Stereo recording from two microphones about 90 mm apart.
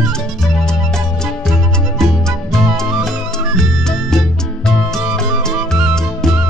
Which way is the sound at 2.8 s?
Centre (ahead or behind).